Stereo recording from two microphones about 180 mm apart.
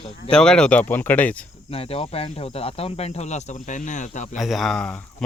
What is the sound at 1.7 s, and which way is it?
Speech, 35° left (ahead or behind).